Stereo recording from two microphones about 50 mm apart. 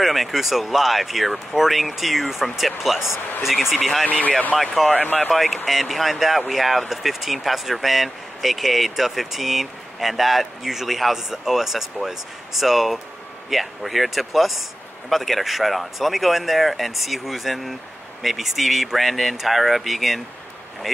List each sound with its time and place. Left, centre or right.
0.0 s speech: centre
4.1 s speech: left
4.6 s speech: centre
4.9 s speech: left
5.3 s speech: centre